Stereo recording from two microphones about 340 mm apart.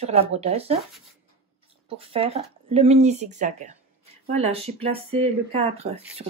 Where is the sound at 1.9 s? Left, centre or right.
Centre.